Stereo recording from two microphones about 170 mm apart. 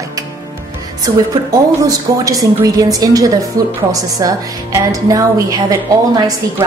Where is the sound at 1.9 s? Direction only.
20° right (ahead or behind).